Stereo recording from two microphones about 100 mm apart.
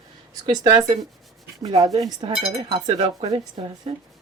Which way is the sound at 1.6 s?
40° right (ahead or behind).